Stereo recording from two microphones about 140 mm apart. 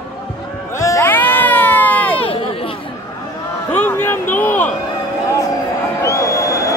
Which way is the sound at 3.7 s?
15° left (ahead or behind).